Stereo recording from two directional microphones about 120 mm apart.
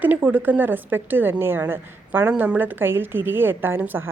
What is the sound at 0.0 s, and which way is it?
A woman's voice, 15° right (ahead or behind).